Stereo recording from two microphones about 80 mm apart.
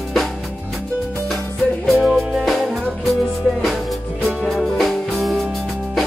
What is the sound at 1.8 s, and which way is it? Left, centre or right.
Music, centre.